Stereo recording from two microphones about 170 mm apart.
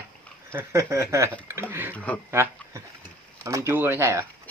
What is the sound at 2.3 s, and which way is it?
Speech, 15° right (ahead or behind).